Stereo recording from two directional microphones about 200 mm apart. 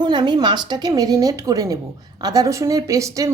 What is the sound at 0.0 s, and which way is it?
A woman's voice, 20° right (ahead or behind).